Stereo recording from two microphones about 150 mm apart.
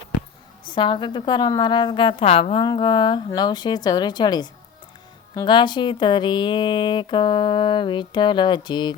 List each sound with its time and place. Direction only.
0.7 s a woman's voice: 35° left (ahead or behind)
5.5 s speech: 30° left (ahead or behind)